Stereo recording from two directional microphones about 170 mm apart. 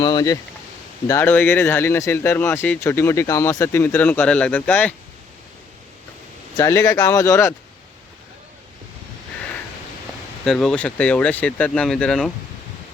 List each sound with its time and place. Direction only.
0.0 s speech: 25° left (ahead or behind)
1.0 s speech: 15° left (ahead or behind)
6.6 s speech: 20° left (ahead or behind)
10.4 s speech: 5° left (ahead or behind)